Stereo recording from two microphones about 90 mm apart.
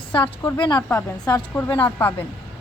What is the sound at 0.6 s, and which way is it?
Speech, 50° left (ahead or behind).